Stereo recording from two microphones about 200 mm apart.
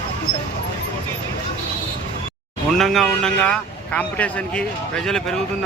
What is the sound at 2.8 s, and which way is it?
A man's voice, centre (ahead or behind).